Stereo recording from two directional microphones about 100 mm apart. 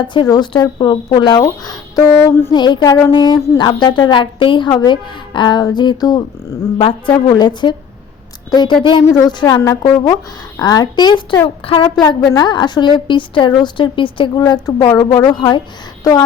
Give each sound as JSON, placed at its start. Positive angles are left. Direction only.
{"t": 0.1, "sound": "a woman's voice", "side_deg": 50}
{"t": 2.1, "sound": "a sound", "side_deg": 25}
{"t": 2.5, "sound": "a woman's voice", "side_deg": 50}
{"t": 4.7, "sound": "a woman's voice", "side_deg": 40}
{"t": 5.3, "sound": "a woman's voice", "side_deg": 50}
{"t": 6.7, "sound": "a woman's voice", "side_deg": 60}
{"t": 9.0, "sound": "a woman's voice", "side_deg": 35}
{"t": 11.4, "sound": "speech", "side_deg": 65}
{"t": 12.4, "sound": "a woman's voice", "side_deg": 50}